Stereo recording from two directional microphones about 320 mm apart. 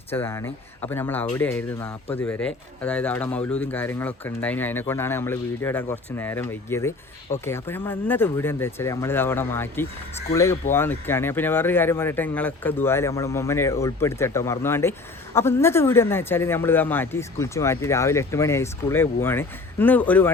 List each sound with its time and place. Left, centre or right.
0.1 s speech: centre